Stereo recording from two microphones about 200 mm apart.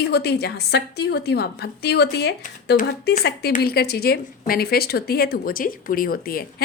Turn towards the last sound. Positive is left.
turn(degrees=45)  # may be behind; listen again after turning